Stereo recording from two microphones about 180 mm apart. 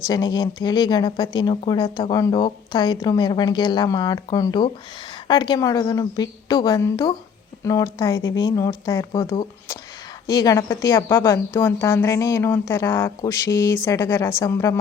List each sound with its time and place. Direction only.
0.1 s speech: 20° left (ahead or behind)